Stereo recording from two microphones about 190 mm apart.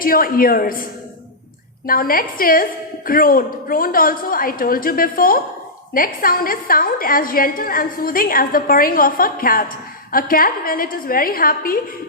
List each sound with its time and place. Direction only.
0.0 s a woman's voice: 50° left (ahead or behind)
1.9 s a woman's voice: 50° left (ahead or behind)